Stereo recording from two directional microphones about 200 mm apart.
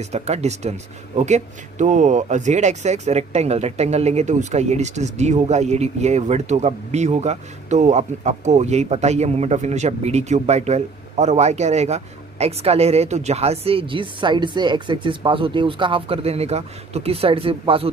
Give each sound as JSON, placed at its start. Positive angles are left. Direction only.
{"t": 0.0, "sound": "speech", "side_deg": -35}